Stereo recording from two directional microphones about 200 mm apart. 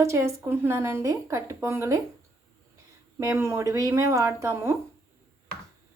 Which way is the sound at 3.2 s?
15° right (ahead or behind).